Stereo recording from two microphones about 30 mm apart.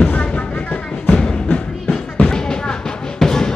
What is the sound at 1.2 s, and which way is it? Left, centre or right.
Music, left.